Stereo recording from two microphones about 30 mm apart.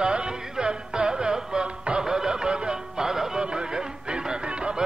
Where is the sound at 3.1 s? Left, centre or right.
Centre.